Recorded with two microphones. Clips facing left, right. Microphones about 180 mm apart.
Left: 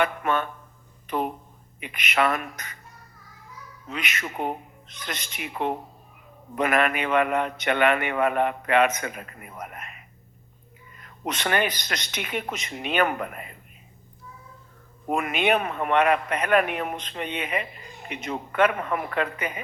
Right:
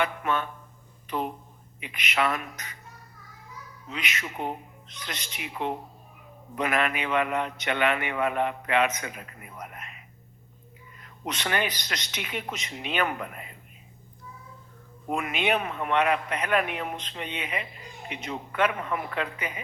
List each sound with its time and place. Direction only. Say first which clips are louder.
0.0 s a man's voice: left 3 dB; 55° left (ahead or behind)
3.8 s a man's voice: left 3 dB; 50° left (ahead or behind)
11.0 s a man's voice: left 4 dB; 50° left (ahead or behind)
15.1 s a man's voice: left 4 dB; 55° left (ahead or behind)